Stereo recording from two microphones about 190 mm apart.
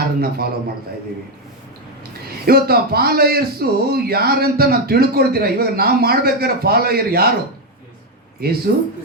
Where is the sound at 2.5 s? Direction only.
55° right (ahead or behind).